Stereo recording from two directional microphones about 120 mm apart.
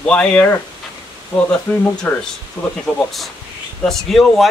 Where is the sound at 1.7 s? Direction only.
10° left (ahead or behind).